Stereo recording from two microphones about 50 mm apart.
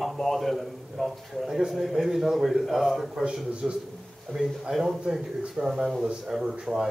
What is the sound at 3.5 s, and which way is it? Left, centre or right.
Speech, right.